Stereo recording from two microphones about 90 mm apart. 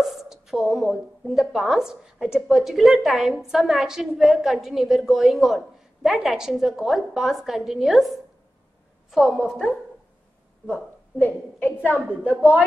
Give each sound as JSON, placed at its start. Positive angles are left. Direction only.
{"t": 0.0, "sound": "a woman's voice", "side_deg": -5}
{"t": 9.1, "sound": "a woman's voice", "side_deg": 0}
{"t": 11.1, "sound": "a woman's voice", "side_deg": 20}
{"t": 12.4, "sound": "a woman's voice", "side_deg": -15}